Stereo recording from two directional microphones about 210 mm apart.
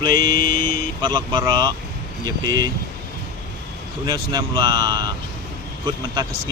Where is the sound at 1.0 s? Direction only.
20° right (ahead or behind).